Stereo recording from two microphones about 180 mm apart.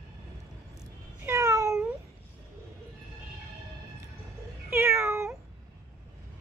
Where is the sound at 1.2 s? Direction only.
15° right (ahead or behind).